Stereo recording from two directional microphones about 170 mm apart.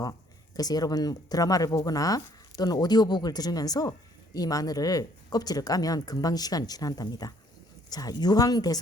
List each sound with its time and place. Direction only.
0.0 s speech: 20° left (ahead or behind)